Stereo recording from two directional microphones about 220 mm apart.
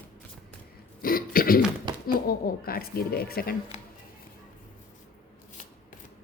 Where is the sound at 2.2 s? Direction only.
40° left (ahead or behind).